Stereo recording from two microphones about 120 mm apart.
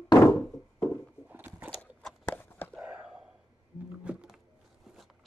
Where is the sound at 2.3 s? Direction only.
15° left (ahead or behind).